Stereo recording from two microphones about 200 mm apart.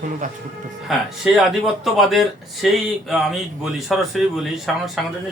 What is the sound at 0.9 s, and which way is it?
Speech, centre (ahead or behind).